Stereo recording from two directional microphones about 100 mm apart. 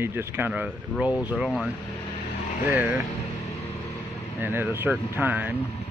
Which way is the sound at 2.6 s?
20° right (ahead or behind).